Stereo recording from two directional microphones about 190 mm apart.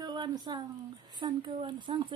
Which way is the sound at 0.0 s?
20° right (ahead or behind).